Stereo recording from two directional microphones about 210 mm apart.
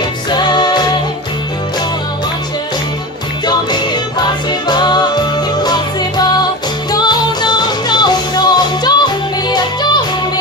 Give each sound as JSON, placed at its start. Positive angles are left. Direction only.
{"t": 0.3, "sound": "music", "side_deg": 20}
{"t": 3.4, "sound": "music", "side_deg": 20}